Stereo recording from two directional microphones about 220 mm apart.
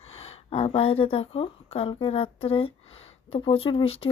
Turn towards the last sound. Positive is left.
turn(degrees=25)  # may be behind; listen again after turning